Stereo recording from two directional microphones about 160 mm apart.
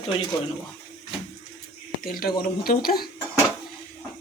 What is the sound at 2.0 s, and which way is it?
Speech, 65° left (ahead or behind).